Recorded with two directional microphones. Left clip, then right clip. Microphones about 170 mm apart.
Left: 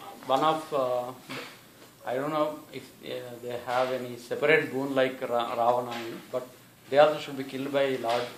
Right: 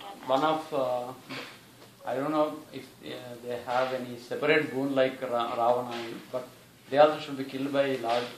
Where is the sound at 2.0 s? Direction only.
55° left (ahead or behind).